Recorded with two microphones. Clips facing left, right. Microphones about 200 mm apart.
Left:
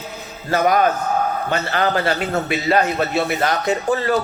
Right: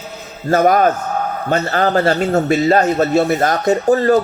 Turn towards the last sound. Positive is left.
turn(degrees=-35)  # may be behind; listen again after turning